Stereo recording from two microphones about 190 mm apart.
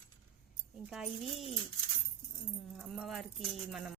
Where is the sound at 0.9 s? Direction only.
Centre (ahead or behind).